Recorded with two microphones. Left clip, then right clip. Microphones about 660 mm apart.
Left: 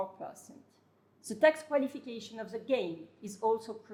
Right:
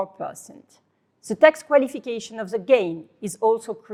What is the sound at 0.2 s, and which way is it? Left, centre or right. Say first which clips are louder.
A woman's voice: right 12 dB; right.